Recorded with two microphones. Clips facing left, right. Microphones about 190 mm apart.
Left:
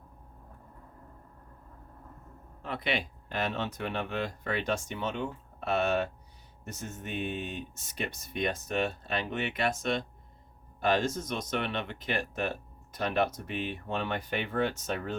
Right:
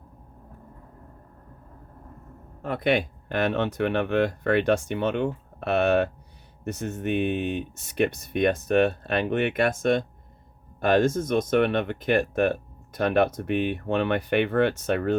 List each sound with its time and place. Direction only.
2.6 s speech: 50° right (ahead or behind)